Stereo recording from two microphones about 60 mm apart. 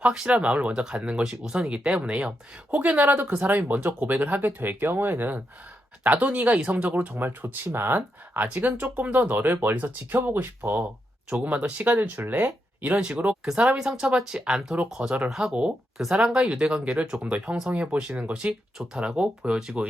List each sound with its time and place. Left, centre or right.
0.0 s speech: centre
2.7 s speech: right
11.4 s speech: right; by 19.7 s centre